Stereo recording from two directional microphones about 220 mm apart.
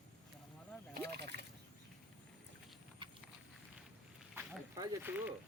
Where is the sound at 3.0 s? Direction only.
20° right (ahead or behind).